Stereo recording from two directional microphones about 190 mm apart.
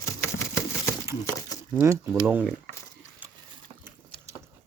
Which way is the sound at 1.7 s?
15° right (ahead or behind).